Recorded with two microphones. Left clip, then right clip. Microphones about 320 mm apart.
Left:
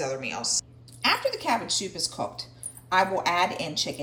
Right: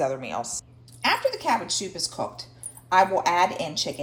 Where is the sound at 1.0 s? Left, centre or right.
Centre.